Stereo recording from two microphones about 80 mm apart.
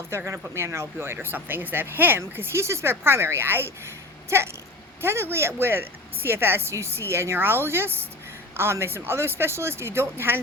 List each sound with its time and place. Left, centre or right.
0.3 s speech: right